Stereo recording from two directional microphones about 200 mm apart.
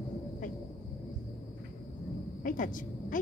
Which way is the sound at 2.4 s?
40° left (ahead or behind).